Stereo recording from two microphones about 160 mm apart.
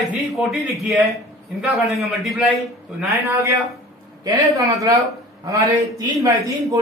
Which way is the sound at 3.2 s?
20° right (ahead or behind).